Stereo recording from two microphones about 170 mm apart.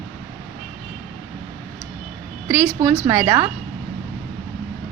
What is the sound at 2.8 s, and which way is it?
Speech, 20° right (ahead or behind).